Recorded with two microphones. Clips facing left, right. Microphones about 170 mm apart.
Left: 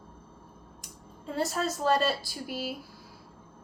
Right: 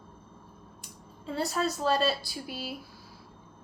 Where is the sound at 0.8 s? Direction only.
45° left (ahead or behind).